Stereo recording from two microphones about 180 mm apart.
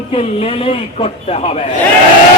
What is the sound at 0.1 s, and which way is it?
Speech, 35° left (ahead or behind).